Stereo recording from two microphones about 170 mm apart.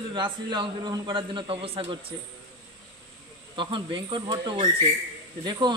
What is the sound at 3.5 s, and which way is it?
A man's voice, 30° right (ahead or behind).